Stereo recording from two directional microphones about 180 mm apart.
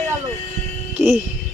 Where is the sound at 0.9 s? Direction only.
15° right (ahead or behind).